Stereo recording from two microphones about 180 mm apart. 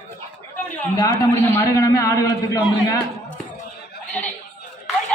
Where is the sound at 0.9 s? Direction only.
15° left (ahead or behind).